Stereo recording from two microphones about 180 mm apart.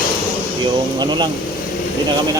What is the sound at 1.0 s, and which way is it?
Speech, 25° right (ahead or behind).